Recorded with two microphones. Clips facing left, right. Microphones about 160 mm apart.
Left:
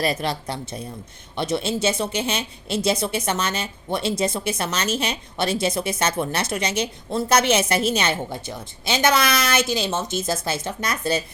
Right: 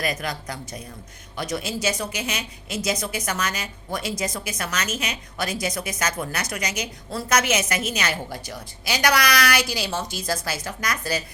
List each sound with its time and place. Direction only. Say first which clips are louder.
0.0 s a woman's voice: left 4 dB; 30° left (ahead or behind)